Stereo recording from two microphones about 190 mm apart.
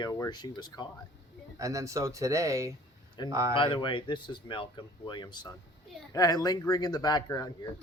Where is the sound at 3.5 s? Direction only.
25° left (ahead or behind).